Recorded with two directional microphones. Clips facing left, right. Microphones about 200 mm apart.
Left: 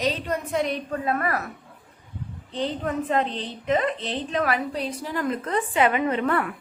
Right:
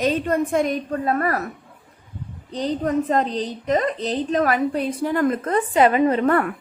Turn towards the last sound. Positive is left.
turn(degrees=-45)  # may be behind; listen again after turning